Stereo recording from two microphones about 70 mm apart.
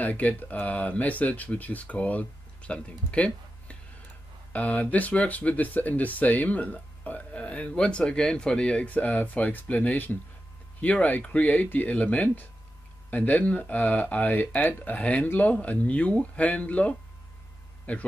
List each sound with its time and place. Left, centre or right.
0.0 s speech: left